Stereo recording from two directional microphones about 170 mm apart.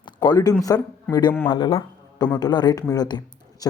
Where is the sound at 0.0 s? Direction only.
25° left (ahead or behind).